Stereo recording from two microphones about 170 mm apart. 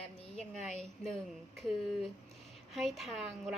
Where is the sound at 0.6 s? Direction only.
Centre (ahead or behind).